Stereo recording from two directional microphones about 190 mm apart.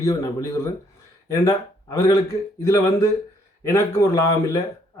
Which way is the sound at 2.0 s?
15° left (ahead or behind).